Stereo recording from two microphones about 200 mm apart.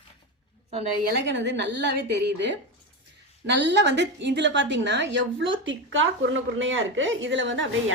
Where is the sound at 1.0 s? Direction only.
60° right (ahead or behind).